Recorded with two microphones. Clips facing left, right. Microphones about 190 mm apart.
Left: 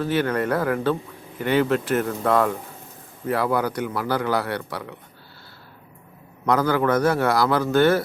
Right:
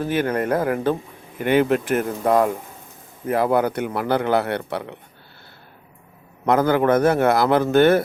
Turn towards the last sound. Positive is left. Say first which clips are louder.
# right 3 dB
turn(degrees=-20)  # may be behind; listen again after turning